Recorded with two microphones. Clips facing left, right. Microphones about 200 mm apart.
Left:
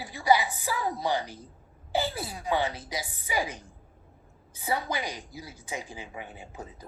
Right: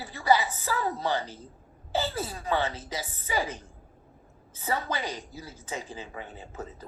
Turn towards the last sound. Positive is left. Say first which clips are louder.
# right 2 dB
turn(degrees=15)  # may be behind; listen again after turning